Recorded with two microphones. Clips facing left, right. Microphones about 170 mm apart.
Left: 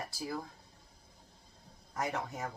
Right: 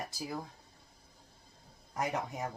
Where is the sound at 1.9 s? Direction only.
15° right (ahead or behind).